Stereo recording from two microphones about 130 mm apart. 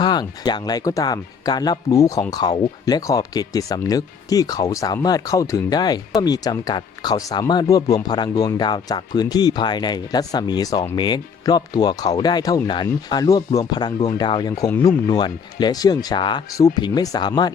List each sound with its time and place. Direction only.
0.0 s speech: 35° left (ahead or behind)